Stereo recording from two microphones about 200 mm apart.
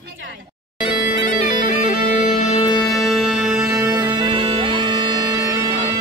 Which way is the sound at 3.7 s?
15° right (ahead or behind).